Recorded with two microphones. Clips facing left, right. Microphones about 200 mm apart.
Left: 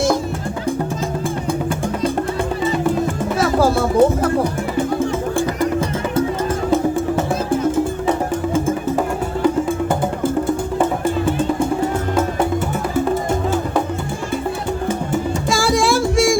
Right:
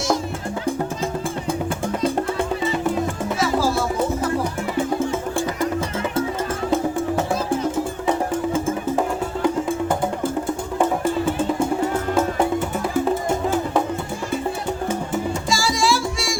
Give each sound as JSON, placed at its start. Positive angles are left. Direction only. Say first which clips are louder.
{"t": 3.3, "sound": "music", "louder": "left 5 dB", "side_deg": 55}
{"t": 15.4, "sound": "music", "louder": "left 5 dB", "side_deg": 55}